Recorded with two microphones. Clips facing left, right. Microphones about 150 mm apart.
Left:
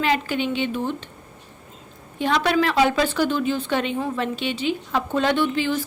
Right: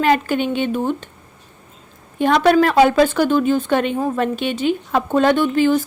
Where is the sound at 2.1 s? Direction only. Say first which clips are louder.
Right 7 dB; 50° right (ahead or behind).